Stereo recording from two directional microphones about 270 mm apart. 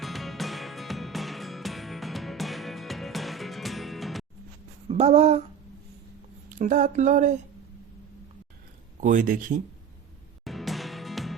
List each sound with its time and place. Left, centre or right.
0.0 s music: centre
4.9 s speech: right
6.6 s speech: right
9.0 s speech: right
10.4 s music: centre